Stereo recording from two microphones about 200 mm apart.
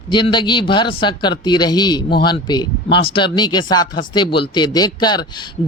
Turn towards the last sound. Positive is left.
turn(degrees=20)  # may be behind; listen again after turning